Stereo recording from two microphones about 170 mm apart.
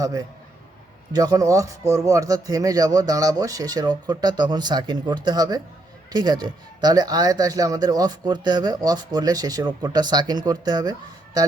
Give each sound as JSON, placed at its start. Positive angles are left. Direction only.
{"t": 0.0, "sound": "speech", "side_deg": -20}